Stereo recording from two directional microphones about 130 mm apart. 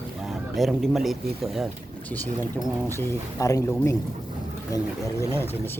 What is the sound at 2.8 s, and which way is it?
Speech, 20° left (ahead or behind).